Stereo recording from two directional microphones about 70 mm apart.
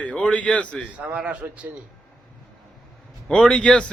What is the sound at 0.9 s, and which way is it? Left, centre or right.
Speech, centre.